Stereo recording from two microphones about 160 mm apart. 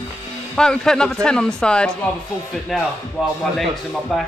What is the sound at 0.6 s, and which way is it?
Speech, 5° left (ahead or behind).